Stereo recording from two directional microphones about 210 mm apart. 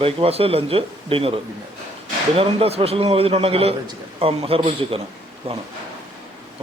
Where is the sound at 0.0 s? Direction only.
25° right (ahead or behind).